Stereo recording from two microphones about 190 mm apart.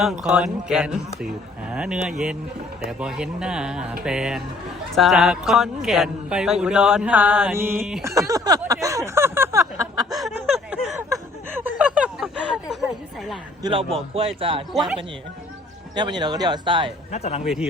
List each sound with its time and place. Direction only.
0.0 s speech: centre (ahead or behind)
8.3 s a sound: 20° right (ahead or behind)
10.1 s a sound: centre (ahead or behind)
11.5 s snicker: 10° right (ahead or behind)
13.6 s a man's voice: 25° right (ahead or behind)
16.0 s a man's voice: 25° right (ahead or behind)
17.1 s speech: 35° left (ahead or behind)
17.4 s speech: centre (ahead or behind)